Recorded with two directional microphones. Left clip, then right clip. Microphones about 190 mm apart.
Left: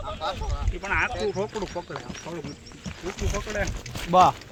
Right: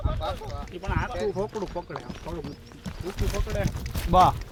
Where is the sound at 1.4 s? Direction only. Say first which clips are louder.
Left 1 dB; 5° left (ahead or behind).